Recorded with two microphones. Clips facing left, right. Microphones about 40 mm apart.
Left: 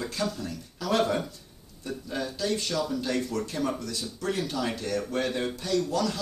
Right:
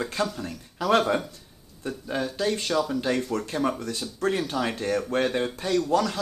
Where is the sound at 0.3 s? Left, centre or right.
Right.